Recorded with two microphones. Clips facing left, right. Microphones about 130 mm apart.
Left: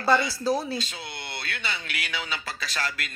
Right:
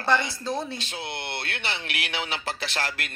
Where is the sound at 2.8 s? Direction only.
55° right (ahead or behind).